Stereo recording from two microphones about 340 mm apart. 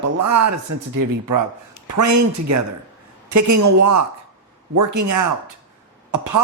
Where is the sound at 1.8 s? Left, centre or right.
Right.